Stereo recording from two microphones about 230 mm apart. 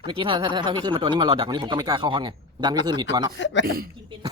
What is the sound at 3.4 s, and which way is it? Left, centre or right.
Speech, left.